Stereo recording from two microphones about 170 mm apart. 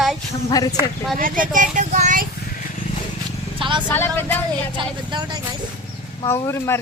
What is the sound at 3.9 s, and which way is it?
Speech, 15° left (ahead or behind).